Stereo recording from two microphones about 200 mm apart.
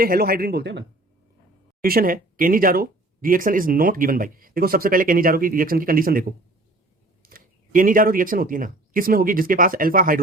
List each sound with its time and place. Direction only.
0.0 s speech: 50° right (ahead or behind)
1.8 s speech: 45° right (ahead or behind)